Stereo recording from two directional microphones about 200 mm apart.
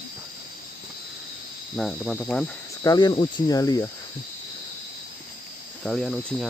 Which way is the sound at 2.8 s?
20° left (ahead or behind).